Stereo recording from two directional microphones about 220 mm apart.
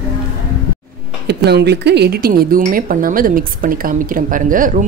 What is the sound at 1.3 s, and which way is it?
Speech, 50° right (ahead or behind).